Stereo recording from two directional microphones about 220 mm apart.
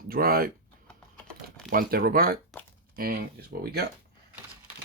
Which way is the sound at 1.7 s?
40° right (ahead or behind).